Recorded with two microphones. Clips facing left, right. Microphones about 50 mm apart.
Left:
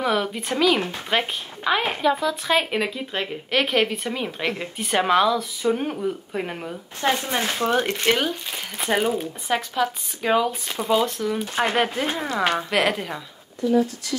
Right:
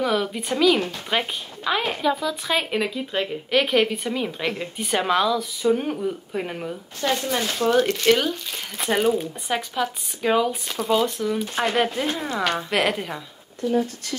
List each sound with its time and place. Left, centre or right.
0.0 s a woman's voice: centre
0.7 s a woman's voice: centre
7.0 s speech: left
8.7 s a woman's voice: centre
12.3 s speech: left
12.6 s speech: centre